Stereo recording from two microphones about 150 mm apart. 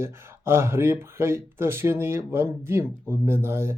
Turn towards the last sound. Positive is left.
turn(degrees=-15)  # may be behind; listen again after turning